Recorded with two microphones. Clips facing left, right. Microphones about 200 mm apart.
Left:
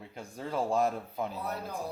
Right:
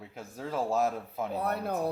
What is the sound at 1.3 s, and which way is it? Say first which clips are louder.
Speech: right 6 dB; 60° right (ahead or behind).